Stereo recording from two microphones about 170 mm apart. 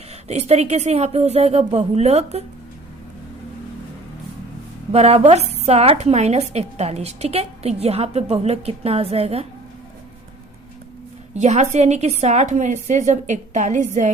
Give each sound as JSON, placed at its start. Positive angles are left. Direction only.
{"t": 0.3, "sound": "a woman's voice", "side_deg": -40}
{"t": 4.9, "sound": "a woman's voice", "side_deg": -40}
{"t": 11.3, "sound": "a woman's voice", "side_deg": -40}